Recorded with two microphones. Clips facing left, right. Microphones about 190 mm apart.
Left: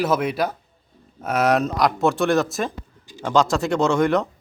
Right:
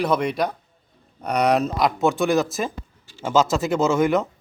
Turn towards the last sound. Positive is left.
turn(degrees=0)  # may be behind; listen again after turning